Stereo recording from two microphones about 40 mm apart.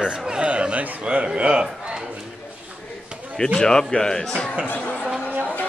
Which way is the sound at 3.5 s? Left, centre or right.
Centre.